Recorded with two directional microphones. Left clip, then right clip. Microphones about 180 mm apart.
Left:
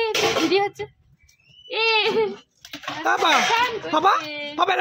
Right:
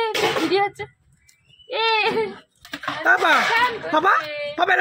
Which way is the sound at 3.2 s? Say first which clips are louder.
Right 1 dB; 15° left (ahead or behind).